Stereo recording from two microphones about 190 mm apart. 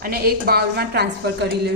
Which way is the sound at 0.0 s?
50° right (ahead or behind).